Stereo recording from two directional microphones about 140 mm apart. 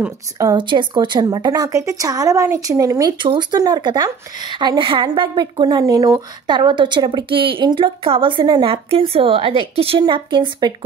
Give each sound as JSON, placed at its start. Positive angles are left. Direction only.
{"t": 0.4, "sound": "speech", "side_deg": -30}